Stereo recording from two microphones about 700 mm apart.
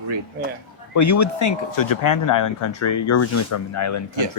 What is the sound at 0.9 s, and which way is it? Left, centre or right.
Speech, left.